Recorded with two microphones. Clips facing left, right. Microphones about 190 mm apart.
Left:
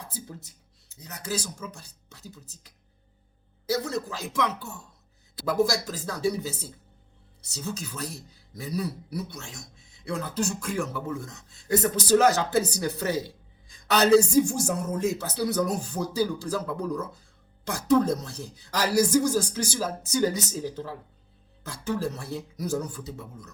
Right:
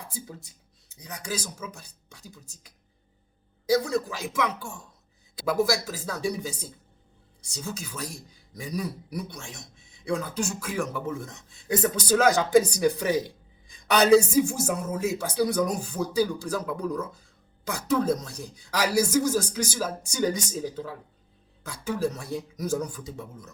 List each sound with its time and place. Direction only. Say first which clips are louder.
0.9 s speech: left 1 dB; 15° right (ahead or behind)
11.0 s speech: right 1 dB; 20° right (ahead or behind)
21.8 s speech: right 1 dB; 15° right (ahead or behind)